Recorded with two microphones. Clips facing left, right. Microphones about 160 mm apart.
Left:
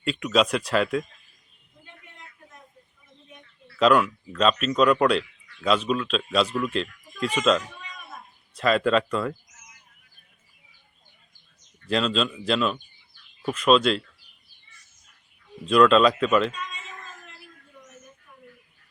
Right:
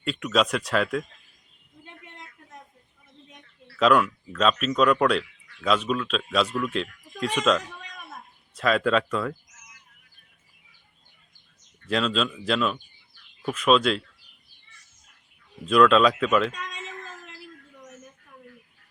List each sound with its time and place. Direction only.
0.0 s speech: centre (ahead or behind)
1.8 s a sound: 80° right
3.8 s speech: centre (ahead or behind)
11.9 s speech: centre (ahead or behind)
15.6 s speech: centre (ahead or behind)
16.5 s a man's voice: 80° right